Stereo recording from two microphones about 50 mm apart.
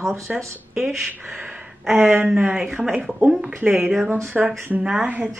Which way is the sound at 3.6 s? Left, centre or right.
Right.